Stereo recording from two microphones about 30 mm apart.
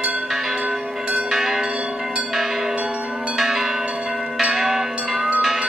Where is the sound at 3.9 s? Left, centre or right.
Right.